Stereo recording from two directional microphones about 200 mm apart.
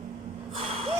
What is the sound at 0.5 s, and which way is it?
Gasp, 30° right (ahead or behind).